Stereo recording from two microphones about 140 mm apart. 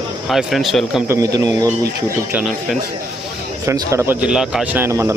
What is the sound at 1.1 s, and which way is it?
Speech, 25° right (ahead or behind).